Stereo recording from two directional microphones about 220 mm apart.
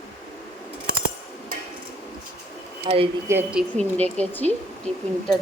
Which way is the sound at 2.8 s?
25° right (ahead or behind).